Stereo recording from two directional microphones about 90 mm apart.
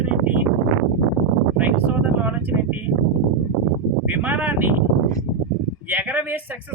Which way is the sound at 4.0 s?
20° right (ahead or behind).